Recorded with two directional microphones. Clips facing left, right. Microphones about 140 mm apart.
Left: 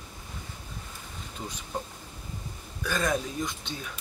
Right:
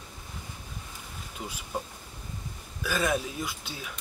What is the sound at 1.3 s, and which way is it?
Speech, 5° right (ahead or behind).